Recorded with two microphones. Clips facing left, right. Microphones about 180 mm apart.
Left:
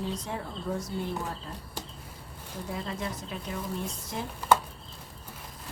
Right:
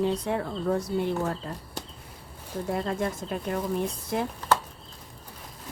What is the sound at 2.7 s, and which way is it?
Speech, 55° right (ahead or behind).